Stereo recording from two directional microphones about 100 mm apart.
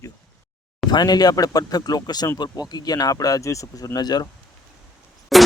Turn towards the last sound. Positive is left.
turn(degrees=0)  # may be behind; listen again after turning